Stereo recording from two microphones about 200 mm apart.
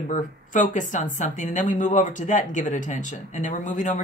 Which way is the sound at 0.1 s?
40° left (ahead or behind).